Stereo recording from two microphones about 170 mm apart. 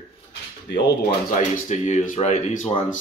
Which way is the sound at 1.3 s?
45° left (ahead or behind).